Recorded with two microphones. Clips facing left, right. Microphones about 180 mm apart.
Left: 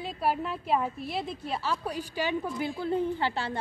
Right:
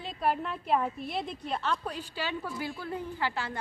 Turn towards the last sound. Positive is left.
turn(degrees=30)  # may be behind; listen again after turning